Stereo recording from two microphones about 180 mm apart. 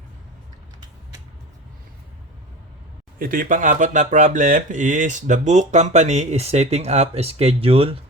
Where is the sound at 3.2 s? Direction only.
50° right (ahead or behind); by 7.9 s 30° right (ahead or behind).